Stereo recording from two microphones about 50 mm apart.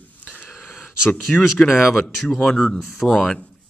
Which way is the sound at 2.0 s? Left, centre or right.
Centre.